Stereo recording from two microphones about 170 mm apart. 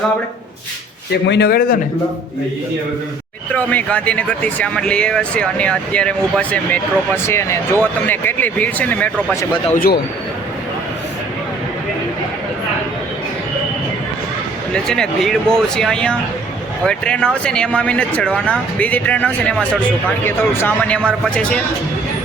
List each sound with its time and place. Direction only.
1.1 s speech: 75° left (ahead or behind)
3.5 s speech: 10° left (ahead or behind)
9.7 s speech: 60° left (ahead or behind)
14.7 s speech: 5° left (ahead or behind)